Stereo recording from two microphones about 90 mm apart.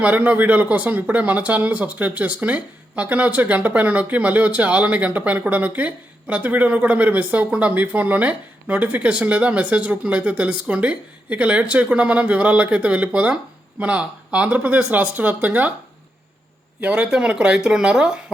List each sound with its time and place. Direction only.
0.0 s speech: 15° right (ahead or behind)
16.8 s speech: 15° right (ahead or behind)